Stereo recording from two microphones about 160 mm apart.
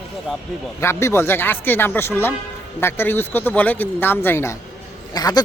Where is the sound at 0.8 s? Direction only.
15° left (ahead or behind).